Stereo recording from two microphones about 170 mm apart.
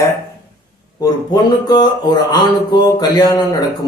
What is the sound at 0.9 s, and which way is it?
A man's voice, 25° left (ahead or behind).